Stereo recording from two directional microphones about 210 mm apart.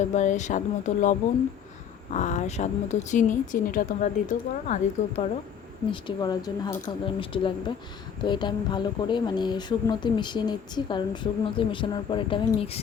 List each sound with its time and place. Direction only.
0.0 s a woman's voice: 35° left (ahead or behind)
5.9 s speech: 20° left (ahead or behind)